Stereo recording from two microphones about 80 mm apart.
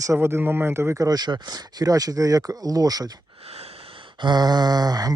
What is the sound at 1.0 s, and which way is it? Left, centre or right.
Speech, right.